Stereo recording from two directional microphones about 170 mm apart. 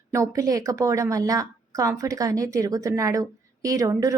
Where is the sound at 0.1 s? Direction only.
20° right (ahead or behind).